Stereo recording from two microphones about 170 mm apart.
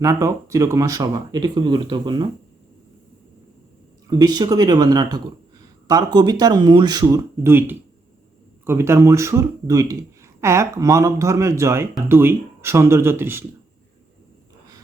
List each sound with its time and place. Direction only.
0.0 s speech: 20° right (ahead or behind)
4.1 s speech: 25° right (ahead or behind)